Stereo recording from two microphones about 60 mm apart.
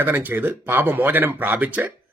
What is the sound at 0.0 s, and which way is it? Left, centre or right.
Speech, right.